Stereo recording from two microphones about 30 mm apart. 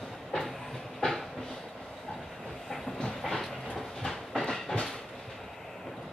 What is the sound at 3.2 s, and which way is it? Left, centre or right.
Train, centre.